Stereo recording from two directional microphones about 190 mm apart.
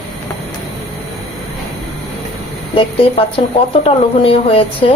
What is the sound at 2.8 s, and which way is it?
A woman's voice, 30° left (ahead or behind).